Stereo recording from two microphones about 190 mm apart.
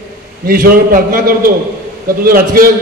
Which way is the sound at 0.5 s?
50° right (ahead or behind).